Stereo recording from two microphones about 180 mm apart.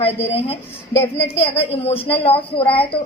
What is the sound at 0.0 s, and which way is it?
A woman's voice, 30° left (ahead or behind).